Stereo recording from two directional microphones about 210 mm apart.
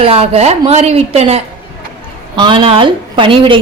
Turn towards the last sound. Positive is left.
turn(degrees=-25)  # may be behind; listen again after turning